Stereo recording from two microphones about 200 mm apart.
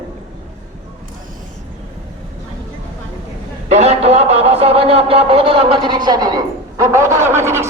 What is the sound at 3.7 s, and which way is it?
A man's voice, 35° right (ahead or behind).